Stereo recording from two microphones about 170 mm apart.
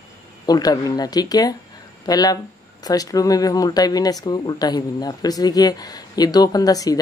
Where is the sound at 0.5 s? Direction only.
20° left (ahead or behind).